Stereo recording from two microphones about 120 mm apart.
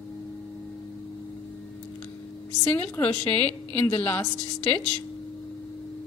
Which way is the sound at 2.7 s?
15° left (ahead or behind).